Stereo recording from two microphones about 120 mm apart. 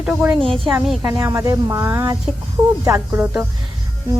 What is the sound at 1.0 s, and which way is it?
Speech, 25° right (ahead or behind).